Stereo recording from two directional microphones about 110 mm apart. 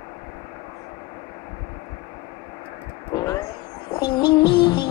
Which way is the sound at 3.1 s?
35° left (ahead or behind).